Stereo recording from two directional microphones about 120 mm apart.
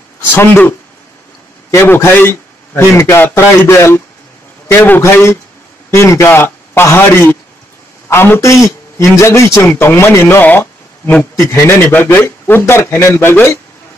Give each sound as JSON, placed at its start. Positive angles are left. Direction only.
{"t": 0.3, "sound": "a man's voice", "side_deg": 20}